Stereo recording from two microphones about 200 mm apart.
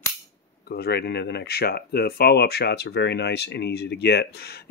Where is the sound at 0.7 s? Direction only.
55° left (ahead or behind).